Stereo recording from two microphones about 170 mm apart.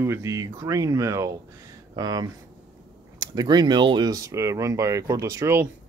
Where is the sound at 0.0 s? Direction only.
15° right (ahead or behind).